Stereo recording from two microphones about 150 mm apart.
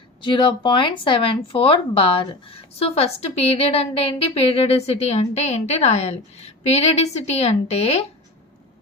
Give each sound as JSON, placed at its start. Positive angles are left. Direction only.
{"t": 0.2, "sound": "speech", "side_deg": 35}